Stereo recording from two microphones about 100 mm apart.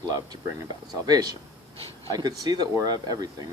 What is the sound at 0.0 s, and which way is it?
Speech, 40° right (ahead or behind).